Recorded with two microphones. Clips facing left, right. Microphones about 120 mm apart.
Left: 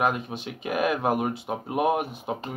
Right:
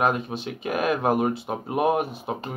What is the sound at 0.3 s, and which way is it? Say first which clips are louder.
Speech: right 2 dB; 15° left (ahead or behind).